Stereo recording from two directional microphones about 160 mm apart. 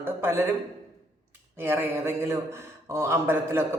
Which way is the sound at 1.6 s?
15° right (ahead or behind).